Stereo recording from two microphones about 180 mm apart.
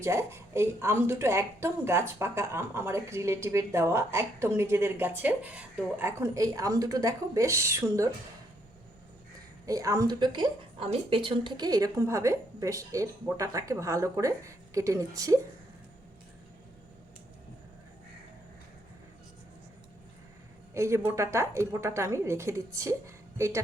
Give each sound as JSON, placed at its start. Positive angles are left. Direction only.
{"t": 0.0, "sound": "speech", "side_deg": -15}
{"t": 9.6, "sound": "speech", "side_deg": -20}
{"t": 20.7, "sound": "speech", "side_deg": -15}